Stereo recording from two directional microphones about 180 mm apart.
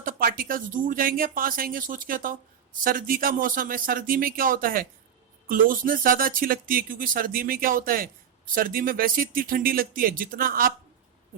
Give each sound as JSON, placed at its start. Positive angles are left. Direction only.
{"t": 0.0, "sound": "speech", "side_deg": -55}